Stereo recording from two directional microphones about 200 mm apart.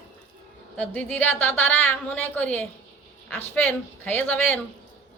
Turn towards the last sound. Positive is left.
turn(degrees=10)  # may be behind; listen again after turning